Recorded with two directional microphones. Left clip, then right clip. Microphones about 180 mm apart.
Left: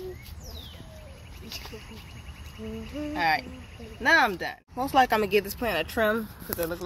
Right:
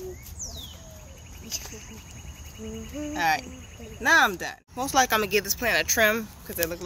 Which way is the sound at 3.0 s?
Centre (ahead or behind).